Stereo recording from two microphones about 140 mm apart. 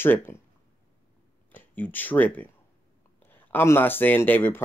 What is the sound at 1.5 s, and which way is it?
Speech, 15° left (ahead or behind).